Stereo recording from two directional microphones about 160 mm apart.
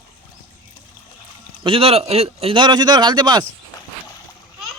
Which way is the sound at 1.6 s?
35° right (ahead or behind).